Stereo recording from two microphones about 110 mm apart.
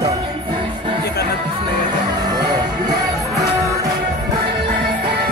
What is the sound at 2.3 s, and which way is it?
Music, 40° right (ahead or behind).